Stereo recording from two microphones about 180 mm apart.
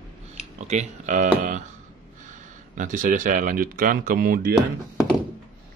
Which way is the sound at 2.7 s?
45° right (ahead or behind).